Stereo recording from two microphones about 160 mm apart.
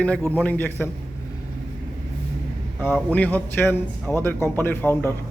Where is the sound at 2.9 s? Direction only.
10° left (ahead or behind).